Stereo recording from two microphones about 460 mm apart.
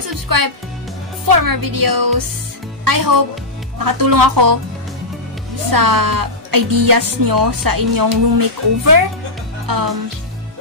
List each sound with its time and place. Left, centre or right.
0.1 s music: right
1.2 s speech: right
5.7 s speech: right